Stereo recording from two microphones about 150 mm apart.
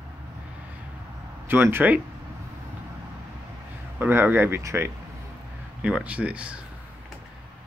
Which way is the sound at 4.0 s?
15° right (ahead or behind).